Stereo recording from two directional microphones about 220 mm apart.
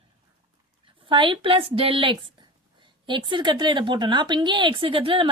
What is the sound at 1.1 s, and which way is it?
Speech, 20° right (ahead or behind).